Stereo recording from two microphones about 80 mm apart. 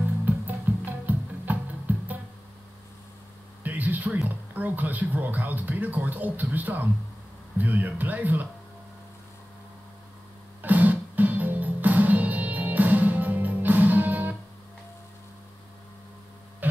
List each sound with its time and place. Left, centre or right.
0.7 s music: right
3.6 s speech: right
10.6 s music: right